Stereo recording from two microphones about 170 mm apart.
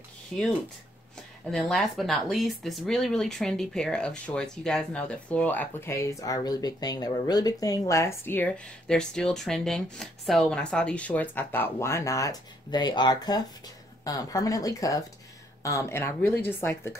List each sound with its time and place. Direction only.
0.3 s speech: 5° left (ahead or behind)